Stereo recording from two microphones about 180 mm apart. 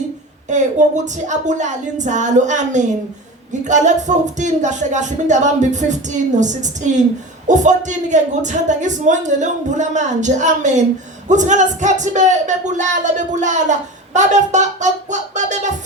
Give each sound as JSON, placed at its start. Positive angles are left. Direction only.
{"t": 0.5, "sound": "speech", "side_deg": -40}